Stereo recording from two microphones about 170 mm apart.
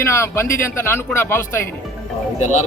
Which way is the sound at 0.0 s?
15° left (ahead or behind).